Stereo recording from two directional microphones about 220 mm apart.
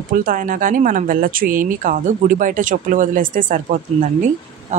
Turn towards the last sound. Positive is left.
turn(degrees=-35)  # may be behind; listen again after turning